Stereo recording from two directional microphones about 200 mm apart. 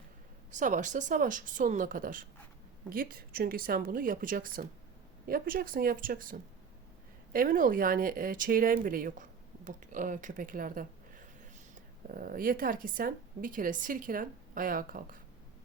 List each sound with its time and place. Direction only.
0.5 s a woman's voice: 40° right (ahead or behind)